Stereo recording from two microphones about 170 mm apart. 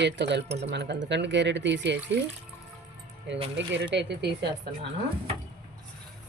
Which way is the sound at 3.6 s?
90° right.